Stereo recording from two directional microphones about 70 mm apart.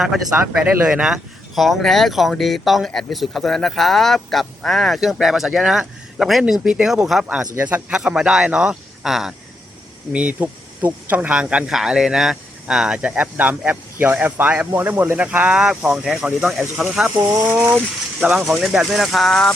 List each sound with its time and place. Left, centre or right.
0.0 s speech: centre
0.6 s speech: centre
1.0 s speech: centre
7.6 s speech: right; by 9.3 s centre
10.1 s speech: centre
13.0 s speech: right; by 17.1 s centre
18.2 s speech: centre